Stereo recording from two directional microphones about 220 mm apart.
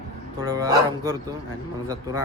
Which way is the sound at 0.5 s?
15° right (ahead or behind).